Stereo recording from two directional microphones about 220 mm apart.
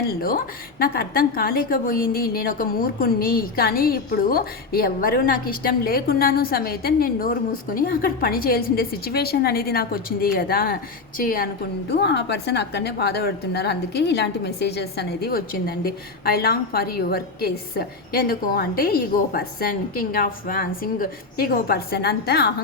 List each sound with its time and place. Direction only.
0.1 s a woman's voice: 40° left (ahead or behind)